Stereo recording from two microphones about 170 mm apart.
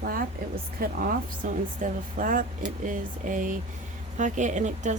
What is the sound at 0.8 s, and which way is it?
A woman's voice, 60° right (ahead or behind).